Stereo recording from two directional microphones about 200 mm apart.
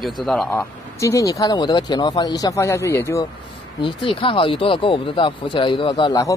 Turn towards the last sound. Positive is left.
turn(degrees=20)  # may be behind; listen again after turning